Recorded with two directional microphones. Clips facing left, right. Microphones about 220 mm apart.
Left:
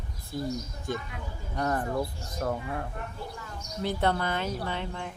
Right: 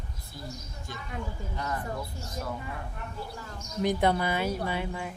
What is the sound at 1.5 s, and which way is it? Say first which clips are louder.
Speech: left 7 dB; 55° left (ahead or behind).